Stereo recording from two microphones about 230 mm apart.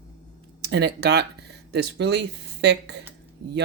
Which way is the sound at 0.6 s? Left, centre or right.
Right.